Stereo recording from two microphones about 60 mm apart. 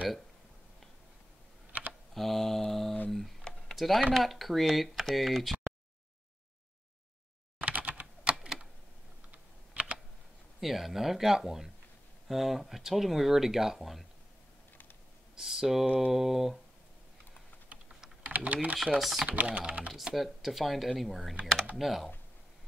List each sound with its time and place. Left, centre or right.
1.7 s computer keyboard: right
2.1 s mantra: centre
3.1 s a sound: centre
3.7 s speech: centre
7.6 s computer keyboard: right
8.4 s typing: centre
9.3 s typing: right
10.6 s speech: centre
15.3 s speech: centre
18.3 s speech: right
18.9 s speech: centre
19.2 s speech: right
20.2 s speech: centre